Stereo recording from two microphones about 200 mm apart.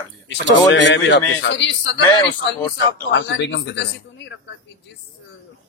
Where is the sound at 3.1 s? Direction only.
65° left (ahead or behind).